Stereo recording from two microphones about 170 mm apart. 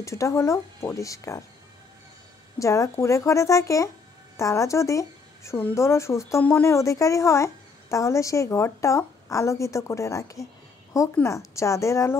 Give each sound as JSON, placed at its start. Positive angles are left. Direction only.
{"t": 0.0, "sound": "speech", "side_deg": 15}
{"t": 2.6, "sound": "speech", "side_deg": 20}